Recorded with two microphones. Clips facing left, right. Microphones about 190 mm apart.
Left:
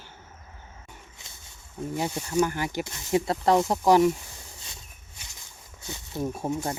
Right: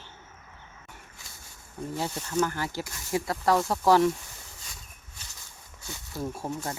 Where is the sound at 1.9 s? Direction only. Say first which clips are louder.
Left 3 dB; 15° left (ahead or behind).